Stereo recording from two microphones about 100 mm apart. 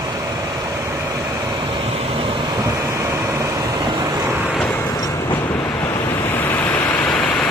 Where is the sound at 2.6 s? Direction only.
25° right (ahead or behind).